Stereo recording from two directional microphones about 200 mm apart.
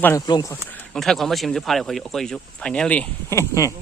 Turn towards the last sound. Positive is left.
turn(degrees=15)  # may be behind; listen again after turning